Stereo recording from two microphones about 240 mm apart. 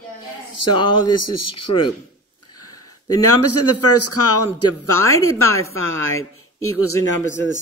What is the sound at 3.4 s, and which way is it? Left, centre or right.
Speech, left.